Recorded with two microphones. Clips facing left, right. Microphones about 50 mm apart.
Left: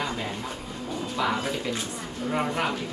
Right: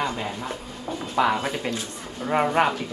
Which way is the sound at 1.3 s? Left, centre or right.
Centre.